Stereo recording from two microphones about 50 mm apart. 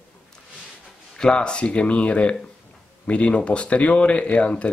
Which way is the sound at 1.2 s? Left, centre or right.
Centre.